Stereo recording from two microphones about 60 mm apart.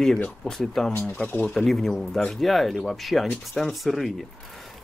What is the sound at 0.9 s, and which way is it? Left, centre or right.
Speech, left.